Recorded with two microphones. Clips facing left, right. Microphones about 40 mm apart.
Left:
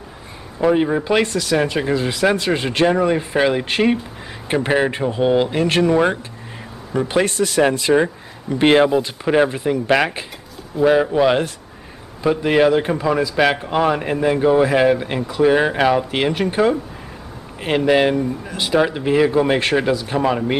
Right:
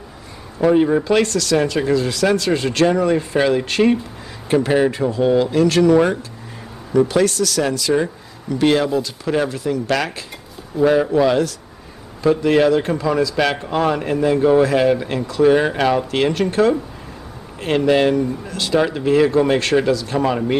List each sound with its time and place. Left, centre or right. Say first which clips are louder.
0.7 s a man's voice: right 2 dB; centre
1.0 s speech: right 1 dB; centre
7.1 s speech: right 1 dB; left
10.8 s a man's voice: even; centre
11.1 s a man's voice: even; left